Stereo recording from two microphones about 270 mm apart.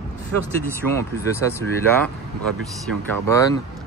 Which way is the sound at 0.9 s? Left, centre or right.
Centre.